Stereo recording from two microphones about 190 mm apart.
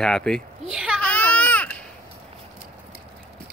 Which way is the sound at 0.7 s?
5° right (ahead or behind).